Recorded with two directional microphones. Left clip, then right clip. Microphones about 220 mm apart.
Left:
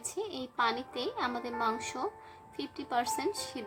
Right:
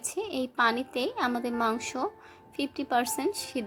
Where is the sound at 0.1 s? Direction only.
15° right (ahead or behind).